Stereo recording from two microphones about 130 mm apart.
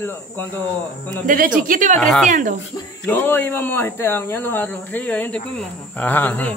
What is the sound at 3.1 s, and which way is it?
Speech, 15° left (ahead or behind).